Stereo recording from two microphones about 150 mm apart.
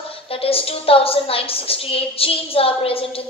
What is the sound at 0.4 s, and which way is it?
A woman's voice, 40° left (ahead or behind).